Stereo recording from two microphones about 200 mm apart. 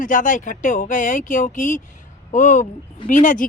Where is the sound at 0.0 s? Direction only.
40° left (ahead or behind).